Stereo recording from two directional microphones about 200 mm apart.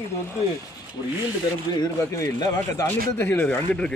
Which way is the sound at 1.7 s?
20° left (ahead or behind).